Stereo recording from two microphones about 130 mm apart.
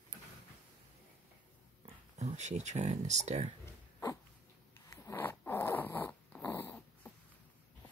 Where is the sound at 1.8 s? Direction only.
60° right (ahead or behind).